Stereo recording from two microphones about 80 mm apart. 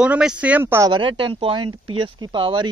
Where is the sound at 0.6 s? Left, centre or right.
Right.